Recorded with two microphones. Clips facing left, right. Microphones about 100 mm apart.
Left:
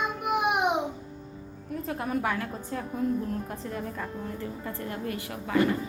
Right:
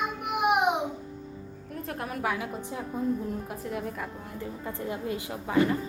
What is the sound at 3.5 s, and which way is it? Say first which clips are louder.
A woman's voice: right 1 dB; 5° right (ahead or behind).